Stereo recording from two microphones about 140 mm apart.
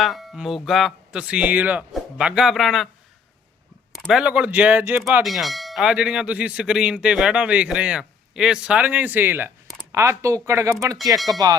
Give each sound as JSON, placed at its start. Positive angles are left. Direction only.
{"t": 0.0, "sound": "speech", "side_deg": 0}
{"t": 3.9, "sound": "speech", "side_deg": 0}
{"t": 5.2, "sound": "speech", "side_deg": 0}